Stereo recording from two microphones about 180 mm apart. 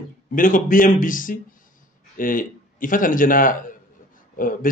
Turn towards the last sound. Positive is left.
turn(degrees=50)  # may be behind; listen again after turning